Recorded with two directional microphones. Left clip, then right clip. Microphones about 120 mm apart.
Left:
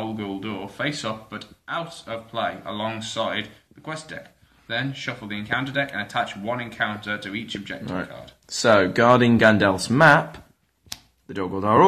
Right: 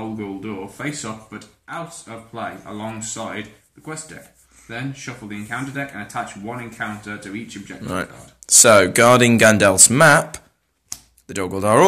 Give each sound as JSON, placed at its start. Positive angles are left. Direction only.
{"t": 0.2, "sound": "speech", "side_deg": 20}
{"t": 7.8, "sound": "speech", "side_deg": -35}